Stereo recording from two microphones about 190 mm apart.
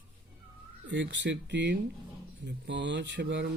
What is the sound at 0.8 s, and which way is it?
Speech, 70° right (ahead or behind).